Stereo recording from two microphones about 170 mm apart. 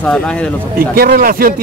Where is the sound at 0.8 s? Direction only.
55° right (ahead or behind).